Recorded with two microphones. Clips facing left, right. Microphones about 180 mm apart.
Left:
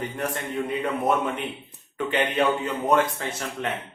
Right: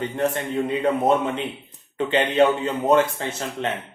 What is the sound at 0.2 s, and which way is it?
Speech, 25° right (ahead or behind).